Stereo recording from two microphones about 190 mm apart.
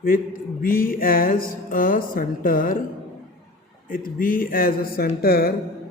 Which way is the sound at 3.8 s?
45° left (ahead or behind).